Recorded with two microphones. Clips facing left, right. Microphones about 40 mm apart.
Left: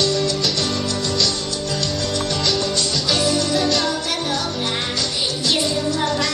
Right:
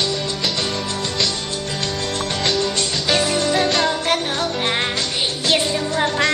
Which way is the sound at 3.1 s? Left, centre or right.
Right.